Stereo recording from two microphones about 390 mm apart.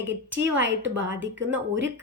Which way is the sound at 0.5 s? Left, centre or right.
Right.